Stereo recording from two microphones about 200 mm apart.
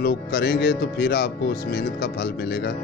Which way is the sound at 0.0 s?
55° left (ahead or behind).